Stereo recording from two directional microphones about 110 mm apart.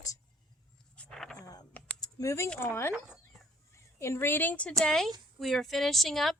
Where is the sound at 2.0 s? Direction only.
30° left (ahead or behind).